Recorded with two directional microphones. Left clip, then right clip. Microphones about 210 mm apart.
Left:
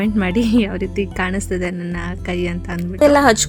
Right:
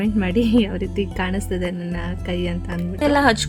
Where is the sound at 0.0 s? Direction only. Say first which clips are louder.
Left 2 dB; 20° left (ahead or behind).